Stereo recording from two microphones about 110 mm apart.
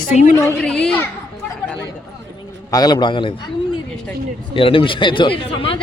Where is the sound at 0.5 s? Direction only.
10° left (ahead or behind).